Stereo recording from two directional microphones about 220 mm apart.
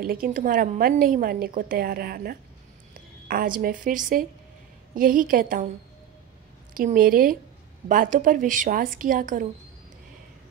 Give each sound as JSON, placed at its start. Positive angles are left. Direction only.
{"t": 0.0, "sound": "a woman's voice", "side_deg": -40}
{"t": 6.7, "sound": "a woman's voice", "side_deg": -40}